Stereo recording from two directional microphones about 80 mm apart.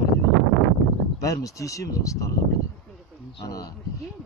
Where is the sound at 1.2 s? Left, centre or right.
Left.